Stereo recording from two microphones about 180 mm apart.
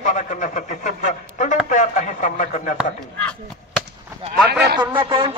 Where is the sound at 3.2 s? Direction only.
5° left (ahead or behind).